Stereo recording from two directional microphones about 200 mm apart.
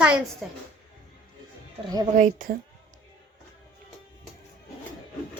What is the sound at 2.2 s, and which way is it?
Speech, 40° right (ahead or behind).